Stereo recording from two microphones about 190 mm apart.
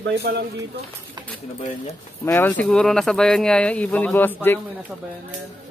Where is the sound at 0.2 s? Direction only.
60° right (ahead or behind).